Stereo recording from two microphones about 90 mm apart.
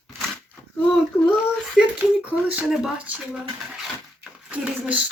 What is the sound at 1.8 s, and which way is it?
Speech, 5° right (ahead or behind).